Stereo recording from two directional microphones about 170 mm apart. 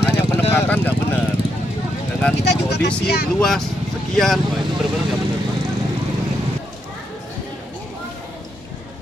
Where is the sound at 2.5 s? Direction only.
85° left.